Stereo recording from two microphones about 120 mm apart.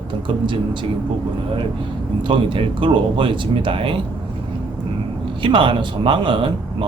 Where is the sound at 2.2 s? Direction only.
45° right (ahead or behind).